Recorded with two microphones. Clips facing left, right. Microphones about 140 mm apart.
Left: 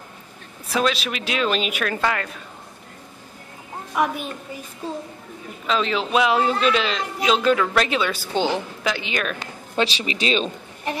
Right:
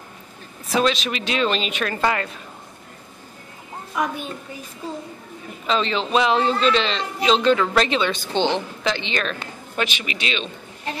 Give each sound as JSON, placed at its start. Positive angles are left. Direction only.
{"t": 0.7, "sound": "a man's voice", "side_deg": 0}
{"t": 3.9, "sound": "a child's voice", "side_deg": 5}
{"t": 5.7, "sound": "a man's voice", "side_deg": 5}
{"t": 9.8, "sound": "speech", "side_deg": 30}